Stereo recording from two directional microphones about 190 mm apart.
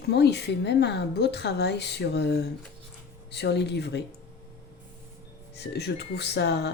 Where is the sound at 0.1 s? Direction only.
60° left (ahead or behind).